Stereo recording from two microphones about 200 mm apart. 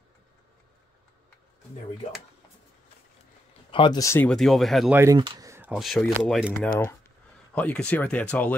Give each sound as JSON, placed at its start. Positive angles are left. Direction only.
{"t": 3.7, "sound": "speech", "side_deg": 20}
{"t": 4.9, "sound": "speech", "side_deg": -15}